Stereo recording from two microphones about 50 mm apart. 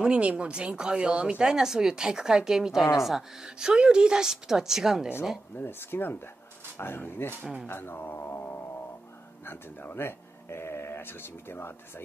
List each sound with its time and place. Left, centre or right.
0.0 s speech: right; by 3.3 s centre
3.4 s speech: centre
5.6 s speech: left
9.5 s speech: left
9.9 s speech: left